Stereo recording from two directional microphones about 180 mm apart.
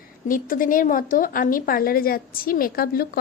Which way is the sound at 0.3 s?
50° left (ahead or behind).